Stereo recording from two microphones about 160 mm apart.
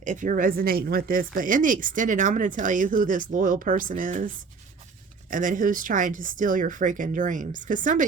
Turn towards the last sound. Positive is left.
turn(degrees=-55)  # may be behind; listen again after turning